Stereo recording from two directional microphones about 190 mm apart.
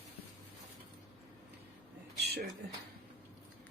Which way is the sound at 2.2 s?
60° right (ahead or behind).